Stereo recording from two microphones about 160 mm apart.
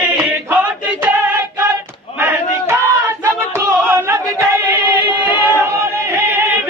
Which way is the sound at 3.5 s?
15° right (ahead or behind).